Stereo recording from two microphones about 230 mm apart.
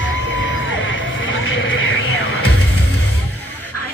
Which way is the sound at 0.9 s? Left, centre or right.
Left.